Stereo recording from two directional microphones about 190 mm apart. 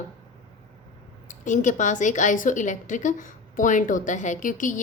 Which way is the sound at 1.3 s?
40° left (ahead or behind).